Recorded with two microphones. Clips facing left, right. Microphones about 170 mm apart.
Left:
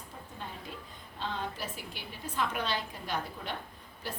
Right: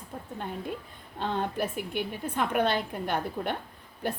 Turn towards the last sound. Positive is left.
turn(degrees=-55)  # may be behind; listen again after turning